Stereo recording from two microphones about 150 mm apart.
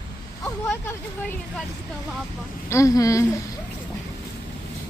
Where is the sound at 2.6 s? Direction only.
20° left (ahead or behind).